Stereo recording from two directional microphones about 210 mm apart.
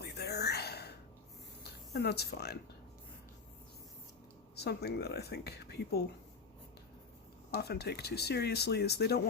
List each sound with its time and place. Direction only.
0.0 s gasp: 50° left (ahead or behind)
1.6 s speech: 50° left (ahead or behind)
4.5 s speech: 50° left (ahead or behind)
7.5 s speech: 50° left (ahead or behind)